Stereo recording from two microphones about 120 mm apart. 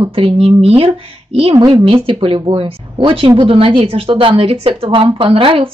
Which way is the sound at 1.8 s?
50° right (ahead or behind).